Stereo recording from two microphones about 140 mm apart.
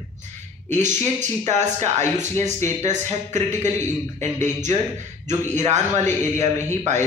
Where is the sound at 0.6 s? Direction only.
55° right (ahead or behind).